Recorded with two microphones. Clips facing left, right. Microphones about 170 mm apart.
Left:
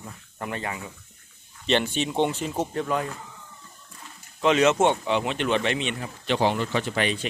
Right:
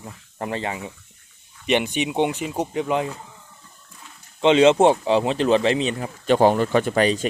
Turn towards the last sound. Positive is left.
turn(degrees=-40)  # may be behind; listen again after turning